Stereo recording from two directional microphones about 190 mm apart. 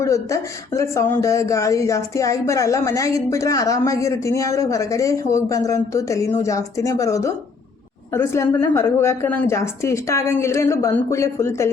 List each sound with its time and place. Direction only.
0.0 s speech: 15° left (ahead or behind)